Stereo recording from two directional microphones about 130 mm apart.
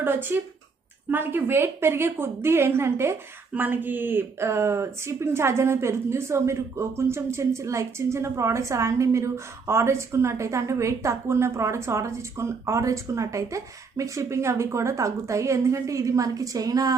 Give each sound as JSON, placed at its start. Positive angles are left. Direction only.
{"t": 0.0, "sound": "a woman's voice", "side_deg": -15}